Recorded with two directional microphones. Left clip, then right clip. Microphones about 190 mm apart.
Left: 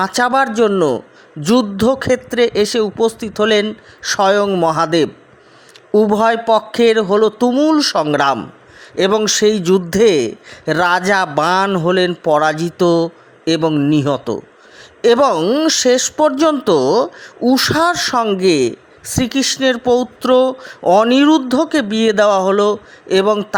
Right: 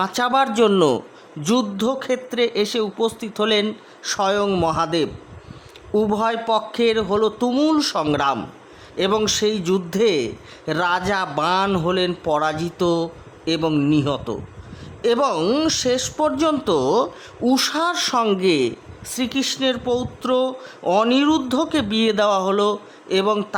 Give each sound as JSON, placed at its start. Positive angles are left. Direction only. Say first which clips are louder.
{"t": 0.0, "sound": "speech", "louder": "left 5 dB", "side_deg": 20}
{"t": 1.4, "sound": "speech", "louder": "left 6 dB", "side_deg": 20}
{"t": 15.4, "sound": "speech", "louder": "left 5 dB", "side_deg": 15}
{"t": 15.6, "sound": "speech", "louder": "left 7 dB", "side_deg": 25}